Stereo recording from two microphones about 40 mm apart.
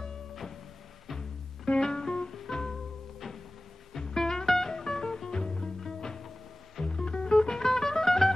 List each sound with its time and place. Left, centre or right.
1.8 s music: centre
3.9 s music: centre
6.8 s music: left